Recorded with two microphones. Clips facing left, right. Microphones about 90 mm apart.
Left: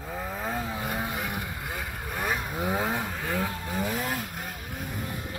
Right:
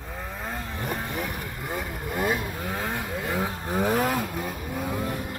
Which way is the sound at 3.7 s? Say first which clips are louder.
Right 9 dB; 45° right (ahead or behind).